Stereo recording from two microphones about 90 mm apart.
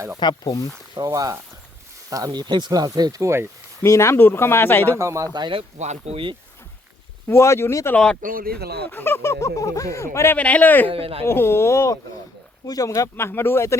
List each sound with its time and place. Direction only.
0.2 s speech: 55° left (ahead or behind)
0.9 s speech: 45° right (ahead or behind)
3.2 s speech: 30° right (ahead or behind)
3.8 s speech: 30° left (ahead or behind)
4.9 s speech: 35° right (ahead or behind)
5.3 s speech: 55° right (ahead or behind)
7.3 s speech: 30° left (ahead or behind)
7.9 s speech: 10° left (ahead or behind)
8.9 s speech: 25° left (ahead or behind)
10.3 s speech: 15° left (ahead or behind)
10.9 s speech: 90° right
11.3 s speech: 30° left (ahead or behind)